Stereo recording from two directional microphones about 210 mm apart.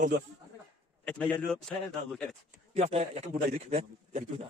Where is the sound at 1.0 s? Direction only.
5° left (ahead or behind).